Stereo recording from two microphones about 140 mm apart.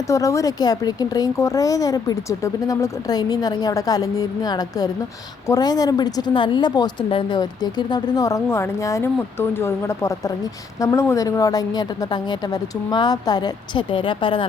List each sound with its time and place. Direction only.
0.1 s speech: 20° left (ahead or behind); by 14.4 s 35° left (ahead or behind)